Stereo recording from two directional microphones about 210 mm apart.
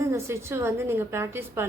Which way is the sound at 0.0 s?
10° right (ahead or behind).